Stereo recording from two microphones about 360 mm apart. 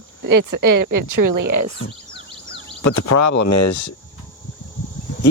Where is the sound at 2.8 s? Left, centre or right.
Left.